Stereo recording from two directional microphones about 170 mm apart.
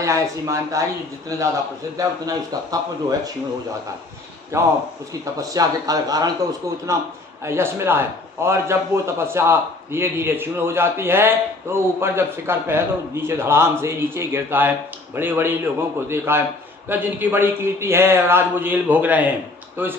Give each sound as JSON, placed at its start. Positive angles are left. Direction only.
{"t": 0.0, "sound": "a man's voice", "side_deg": -15}
{"t": 4.5, "sound": "a man's voice", "side_deg": -15}
{"t": 7.4, "sound": "a man's voice", "side_deg": -15}